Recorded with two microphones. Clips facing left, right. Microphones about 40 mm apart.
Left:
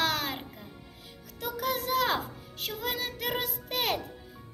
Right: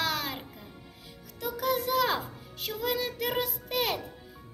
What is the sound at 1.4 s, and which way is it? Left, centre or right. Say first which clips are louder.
Speech: right 2 dB; left.